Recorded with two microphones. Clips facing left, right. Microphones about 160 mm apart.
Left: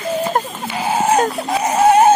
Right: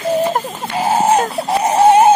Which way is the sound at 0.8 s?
35° right (ahead or behind).